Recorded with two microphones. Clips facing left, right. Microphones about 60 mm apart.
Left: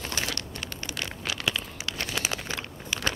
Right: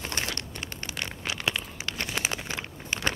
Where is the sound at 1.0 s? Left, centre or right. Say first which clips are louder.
Even; right.